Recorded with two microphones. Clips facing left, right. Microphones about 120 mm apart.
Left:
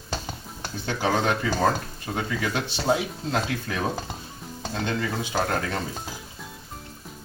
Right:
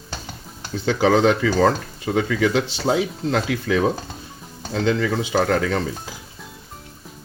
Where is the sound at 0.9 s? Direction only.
90° right.